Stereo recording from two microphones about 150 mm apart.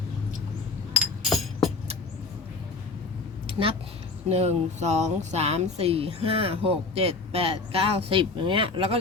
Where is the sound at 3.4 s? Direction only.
35° right (ahead or behind).